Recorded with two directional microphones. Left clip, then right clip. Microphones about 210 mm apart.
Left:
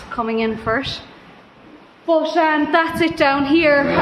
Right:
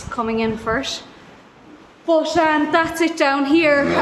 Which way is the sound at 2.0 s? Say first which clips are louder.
Even; 5° right (ahead or behind).